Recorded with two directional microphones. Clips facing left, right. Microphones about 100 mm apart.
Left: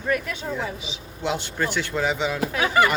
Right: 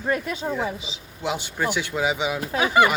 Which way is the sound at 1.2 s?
10° right (ahead or behind).